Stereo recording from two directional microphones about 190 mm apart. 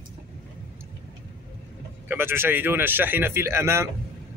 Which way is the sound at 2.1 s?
10° right (ahead or behind).